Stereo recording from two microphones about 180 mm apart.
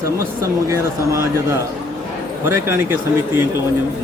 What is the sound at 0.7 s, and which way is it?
Speech, 15° right (ahead or behind).